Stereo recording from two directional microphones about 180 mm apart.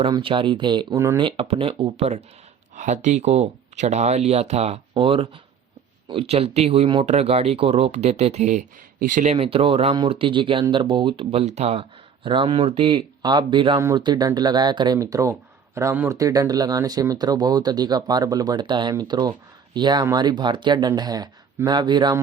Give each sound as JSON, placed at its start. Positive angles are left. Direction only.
{"t": 0.0, "sound": "speech", "side_deg": -30}
{"t": 1.2, "sound": "speech", "side_deg": -30}